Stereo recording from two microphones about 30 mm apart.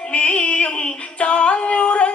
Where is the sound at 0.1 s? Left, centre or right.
Left.